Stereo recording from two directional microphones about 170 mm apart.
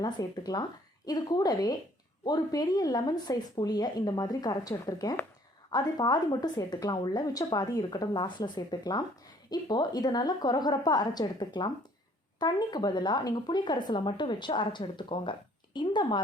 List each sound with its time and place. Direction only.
0.0 s speech: 25° left (ahead or behind)